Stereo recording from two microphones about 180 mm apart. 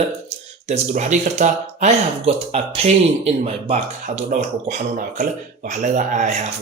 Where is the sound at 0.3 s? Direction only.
40° right (ahead or behind).